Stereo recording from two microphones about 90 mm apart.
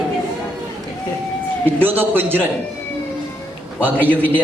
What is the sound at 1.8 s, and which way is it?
Speech, 20° right (ahead or behind).